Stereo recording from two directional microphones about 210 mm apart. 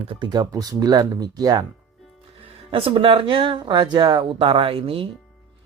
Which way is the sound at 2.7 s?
25° right (ahead or behind).